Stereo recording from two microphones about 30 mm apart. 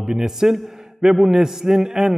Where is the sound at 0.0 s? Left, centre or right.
Centre.